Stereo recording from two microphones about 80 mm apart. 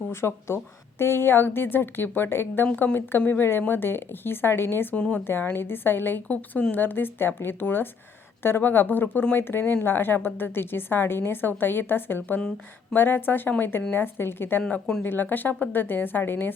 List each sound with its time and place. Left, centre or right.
0.1 s speech: left
4.9 s speech: centre
5.2 s speech: left
14.6 s speech: centre
15.0 s speech: left